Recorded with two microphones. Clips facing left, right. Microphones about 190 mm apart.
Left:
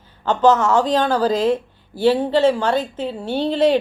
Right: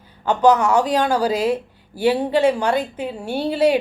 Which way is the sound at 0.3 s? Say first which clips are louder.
Even; 10° right (ahead or behind).